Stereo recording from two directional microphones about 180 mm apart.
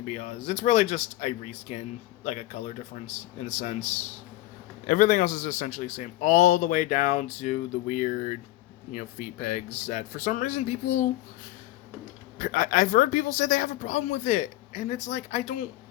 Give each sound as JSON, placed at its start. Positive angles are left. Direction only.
{"t": 0.1, "sound": "a man's voice", "side_deg": 40}
{"t": 12.4, "sound": "a man's voice", "side_deg": 45}